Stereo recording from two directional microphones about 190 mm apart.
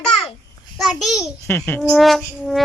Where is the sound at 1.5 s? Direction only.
10° left (ahead or behind).